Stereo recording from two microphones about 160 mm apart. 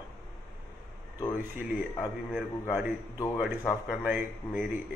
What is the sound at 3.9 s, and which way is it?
Speech, 5° right (ahead or behind).